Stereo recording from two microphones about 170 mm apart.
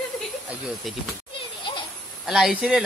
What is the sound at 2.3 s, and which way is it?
Speech, 5° right (ahead or behind).